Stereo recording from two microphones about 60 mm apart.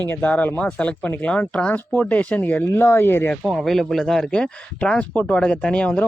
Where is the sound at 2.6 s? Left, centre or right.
Left.